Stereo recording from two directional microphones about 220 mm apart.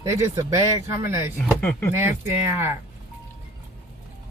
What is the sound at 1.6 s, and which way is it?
Speech, 5° left (ahead or behind).